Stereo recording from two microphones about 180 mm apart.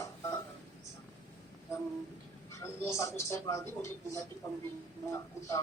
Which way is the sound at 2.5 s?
15° left (ahead or behind).